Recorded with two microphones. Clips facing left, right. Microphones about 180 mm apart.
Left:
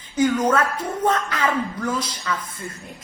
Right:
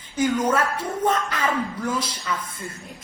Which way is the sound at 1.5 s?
10° right (ahead or behind).